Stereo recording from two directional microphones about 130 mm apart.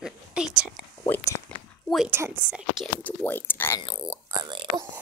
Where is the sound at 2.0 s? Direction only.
15° right (ahead or behind).